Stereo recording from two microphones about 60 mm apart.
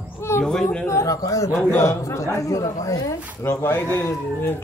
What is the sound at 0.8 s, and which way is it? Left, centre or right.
A woman's voice, left.